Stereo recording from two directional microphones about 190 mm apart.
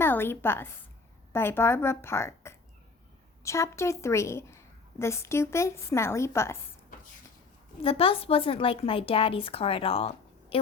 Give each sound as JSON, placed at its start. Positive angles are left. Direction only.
{"t": 0.0, "sound": "a woman's voice", "side_deg": 10}
{"t": 7.8, "sound": "a woman's voice", "side_deg": 30}